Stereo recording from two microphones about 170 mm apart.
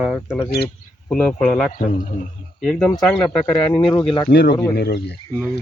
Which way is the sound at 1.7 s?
50° left (ahead or behind).